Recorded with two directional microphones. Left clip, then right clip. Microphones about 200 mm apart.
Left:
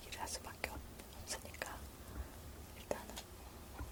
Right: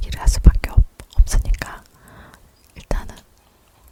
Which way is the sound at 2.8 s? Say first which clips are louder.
Right 14 dB; 45° right (ahead or behind).